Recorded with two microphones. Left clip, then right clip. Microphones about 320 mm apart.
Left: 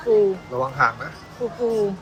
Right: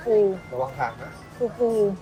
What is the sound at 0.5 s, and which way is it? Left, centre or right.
Speech, left.